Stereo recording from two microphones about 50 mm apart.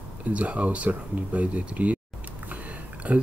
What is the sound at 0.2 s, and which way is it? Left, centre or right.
Speech, right.